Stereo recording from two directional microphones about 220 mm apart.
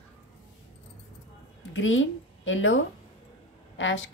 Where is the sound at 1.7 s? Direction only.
60° left (ahead or behind).